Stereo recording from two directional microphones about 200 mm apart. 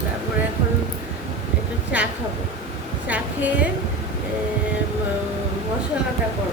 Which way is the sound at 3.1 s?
5° right (ahead or behind).